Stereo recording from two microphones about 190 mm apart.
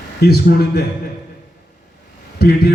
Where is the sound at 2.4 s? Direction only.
55° left (ahead or behind).